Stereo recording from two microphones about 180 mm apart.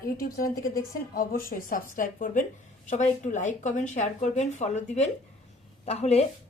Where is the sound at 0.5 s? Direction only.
20° left (ahead or behind).